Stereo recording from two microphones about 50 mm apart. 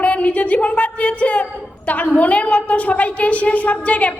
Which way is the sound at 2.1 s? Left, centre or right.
Left.